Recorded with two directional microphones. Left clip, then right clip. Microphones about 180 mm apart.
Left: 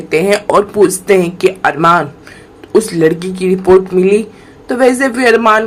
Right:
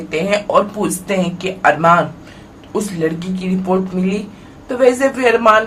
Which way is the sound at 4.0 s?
35° left (ahead or behind).